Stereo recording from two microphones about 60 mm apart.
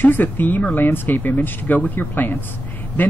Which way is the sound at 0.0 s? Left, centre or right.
Left.